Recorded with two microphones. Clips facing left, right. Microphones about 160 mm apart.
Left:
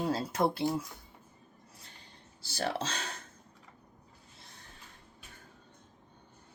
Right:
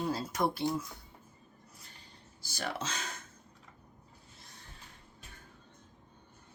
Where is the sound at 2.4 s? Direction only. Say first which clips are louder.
Left 4 dB; 30° left (ahead or behind).